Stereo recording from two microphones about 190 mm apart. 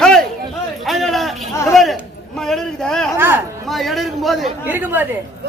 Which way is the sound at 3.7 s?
Centre (ahead or behind).